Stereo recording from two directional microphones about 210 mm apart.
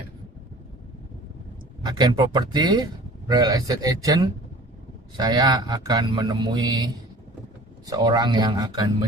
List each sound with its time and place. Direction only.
1.8 s a man's voice: 20° right (ahead or behind)